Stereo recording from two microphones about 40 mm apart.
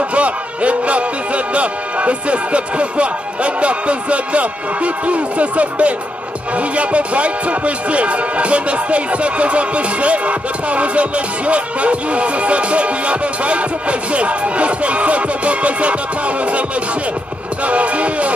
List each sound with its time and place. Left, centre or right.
0.1 s a man's voice: right
17.6 s a man's voice: right